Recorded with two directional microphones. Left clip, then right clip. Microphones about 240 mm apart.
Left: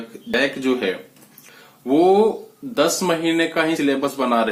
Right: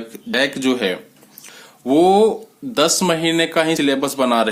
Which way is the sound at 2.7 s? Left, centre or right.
Right.